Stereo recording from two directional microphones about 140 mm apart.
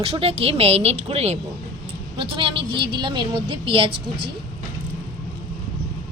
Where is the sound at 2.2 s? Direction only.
40° right (ahead or behind).